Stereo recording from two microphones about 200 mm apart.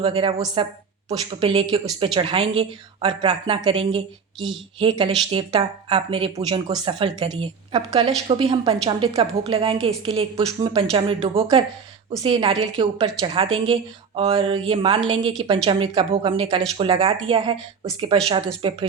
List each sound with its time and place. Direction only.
0.0 s a woman's voice: 25° right (ahead or behind)